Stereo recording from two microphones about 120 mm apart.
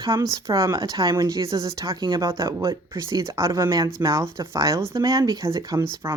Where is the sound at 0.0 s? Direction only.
30° right (ahead or behind).